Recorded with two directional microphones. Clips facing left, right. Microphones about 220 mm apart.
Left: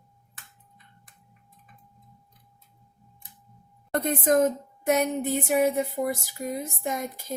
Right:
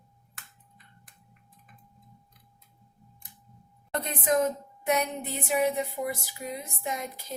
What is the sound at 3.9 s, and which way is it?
A woman's voice, 50° left (ahead or behind).